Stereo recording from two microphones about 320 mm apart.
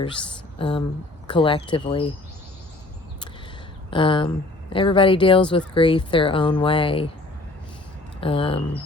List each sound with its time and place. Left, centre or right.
0.6 s speech: centre
3.8 s speech: centre
8.2 s speech: centre